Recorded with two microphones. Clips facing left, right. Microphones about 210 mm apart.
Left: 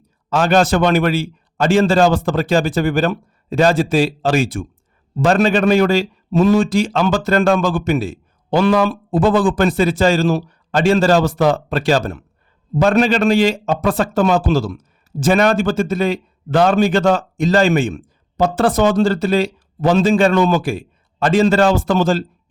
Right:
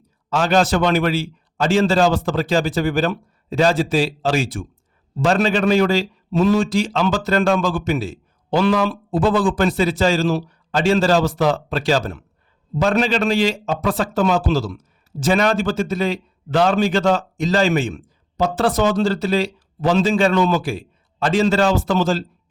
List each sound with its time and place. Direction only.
0.3 s a man's voice: 55° left (ahead or behind)